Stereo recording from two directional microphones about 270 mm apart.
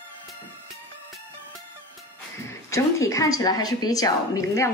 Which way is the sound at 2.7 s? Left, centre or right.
Centre.